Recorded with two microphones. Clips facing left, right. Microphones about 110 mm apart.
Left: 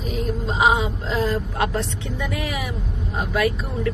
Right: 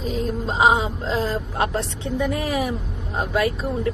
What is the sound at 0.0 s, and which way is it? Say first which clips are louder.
Speech: right 1 dB; 30° right (ahead or behind).